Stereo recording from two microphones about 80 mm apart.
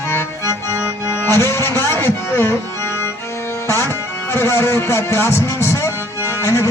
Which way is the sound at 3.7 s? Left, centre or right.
Left.